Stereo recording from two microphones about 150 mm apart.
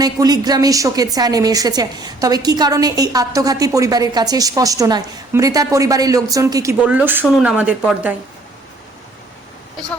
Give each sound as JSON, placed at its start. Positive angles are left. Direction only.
{"t": 0.0, "sound": "a woman's voice", "side_deg": -25}